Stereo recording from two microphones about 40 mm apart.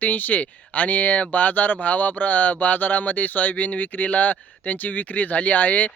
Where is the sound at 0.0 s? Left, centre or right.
Left.